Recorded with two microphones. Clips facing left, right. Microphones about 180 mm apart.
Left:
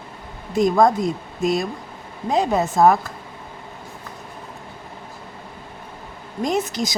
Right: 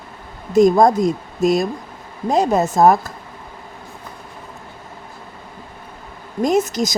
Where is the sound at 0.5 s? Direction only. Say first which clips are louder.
Right 4 dB; 40° right (ahead or behind).